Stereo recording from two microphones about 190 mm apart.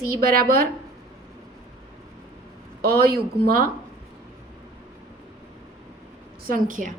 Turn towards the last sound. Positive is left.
turn(degrees=-45)  # may be behind; listen again after turning